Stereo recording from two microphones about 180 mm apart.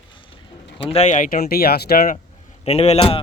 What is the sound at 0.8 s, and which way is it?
Speech, 35° left (ahead or behind).